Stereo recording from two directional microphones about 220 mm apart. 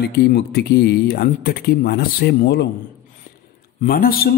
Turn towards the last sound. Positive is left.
turn(degrees=40)  # may be behind; listen again after turning